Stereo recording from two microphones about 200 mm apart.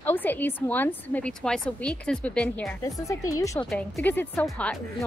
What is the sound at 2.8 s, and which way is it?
A woman's voice, 15° left (ahead or behind).